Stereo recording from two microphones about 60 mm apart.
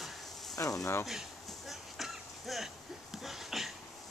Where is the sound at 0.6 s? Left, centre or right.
Left.